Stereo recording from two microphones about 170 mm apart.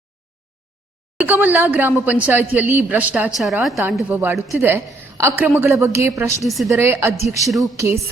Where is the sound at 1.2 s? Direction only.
10° right (ahead or behind).